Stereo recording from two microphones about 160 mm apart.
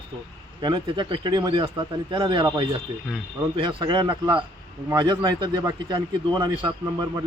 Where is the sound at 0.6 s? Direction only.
30° right (ahead or behind).